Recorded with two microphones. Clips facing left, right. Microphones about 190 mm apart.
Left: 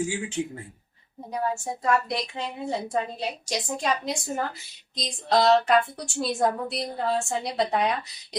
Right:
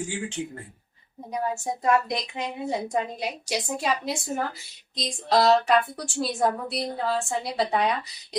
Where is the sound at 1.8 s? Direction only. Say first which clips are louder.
Right 1 dB; 15° right (ahead or behind).